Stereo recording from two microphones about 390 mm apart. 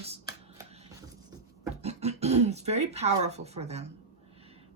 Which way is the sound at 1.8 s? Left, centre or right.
Centre.